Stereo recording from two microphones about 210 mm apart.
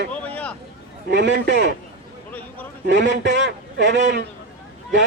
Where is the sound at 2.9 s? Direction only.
55° right (ahead or behind).